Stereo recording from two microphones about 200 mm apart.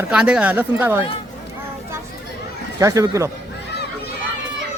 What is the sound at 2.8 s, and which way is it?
Speech, 15° right (ahead or behind).